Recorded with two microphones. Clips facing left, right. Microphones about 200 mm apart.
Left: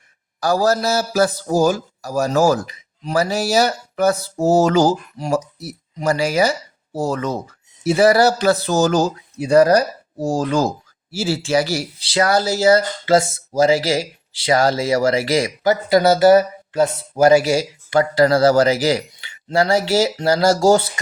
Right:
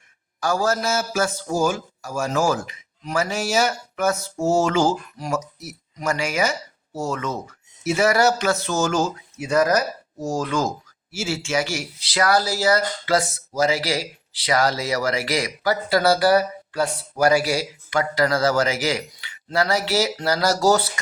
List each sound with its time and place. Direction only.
0.3 s a man's voice: 35° left (ahead or behind)